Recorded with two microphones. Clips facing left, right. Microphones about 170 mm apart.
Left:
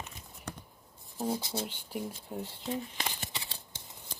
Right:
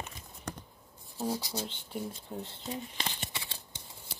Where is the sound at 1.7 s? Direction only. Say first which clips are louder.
Even; 10° left (ahead or behind).